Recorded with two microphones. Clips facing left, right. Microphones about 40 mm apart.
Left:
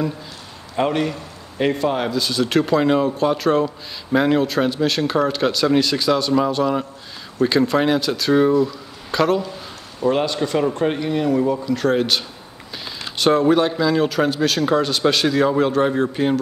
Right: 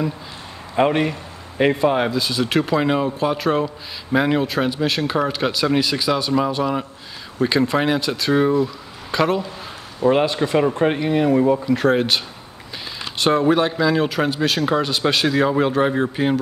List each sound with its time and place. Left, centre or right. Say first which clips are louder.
0.7 s a man's voice: right 2 dB; centre